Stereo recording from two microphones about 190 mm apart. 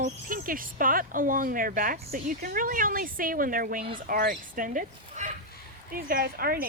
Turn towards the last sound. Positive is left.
turn(degrees=-50)  # may be behind; listen again after turning